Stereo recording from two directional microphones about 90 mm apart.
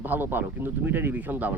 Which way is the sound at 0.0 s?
20° right (ahead or behind).